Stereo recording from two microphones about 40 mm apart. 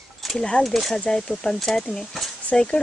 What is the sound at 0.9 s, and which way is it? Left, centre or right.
Speech, left.